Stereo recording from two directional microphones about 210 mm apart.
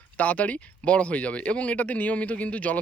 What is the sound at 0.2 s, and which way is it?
Speech, 5° left (ahead or behind).